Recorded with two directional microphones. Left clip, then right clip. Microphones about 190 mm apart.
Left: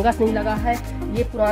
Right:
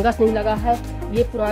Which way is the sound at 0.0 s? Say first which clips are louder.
Right 2 dB; 30° right (ahead or behind).